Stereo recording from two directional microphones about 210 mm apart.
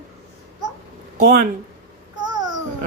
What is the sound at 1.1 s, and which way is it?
Speech, 40° right (ahead or behind).